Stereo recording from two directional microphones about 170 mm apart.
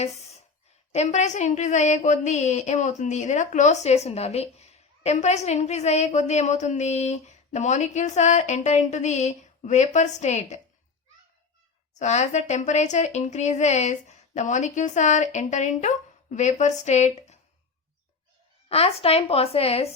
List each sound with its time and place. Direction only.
0.9 s a woman's voice: 40° left (ahead or behind)
11.9 s a woman's voice: 45° left (ahead or behind)
18.7 s a woman's voice: 35° left (ahead or behind)